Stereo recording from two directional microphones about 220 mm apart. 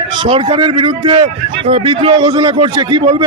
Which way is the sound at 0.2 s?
25° right (ahead or behind).